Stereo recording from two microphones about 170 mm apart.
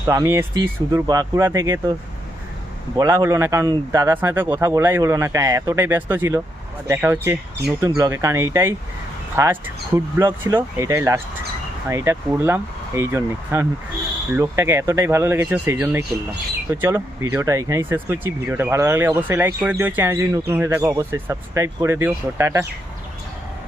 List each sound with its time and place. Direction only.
0.1 s speech: 15° right (ahead or behind)
2.9 s speech: 20° right (ahead or behind)